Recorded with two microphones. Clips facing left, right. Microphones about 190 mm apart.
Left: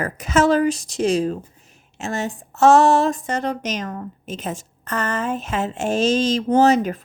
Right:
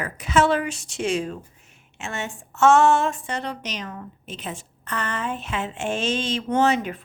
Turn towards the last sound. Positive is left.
turn(degrees=40)  # may be behind; listen again after turning